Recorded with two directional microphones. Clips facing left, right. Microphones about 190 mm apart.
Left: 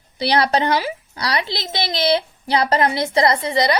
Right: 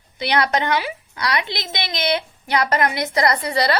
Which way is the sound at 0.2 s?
35° left (ahead or behind).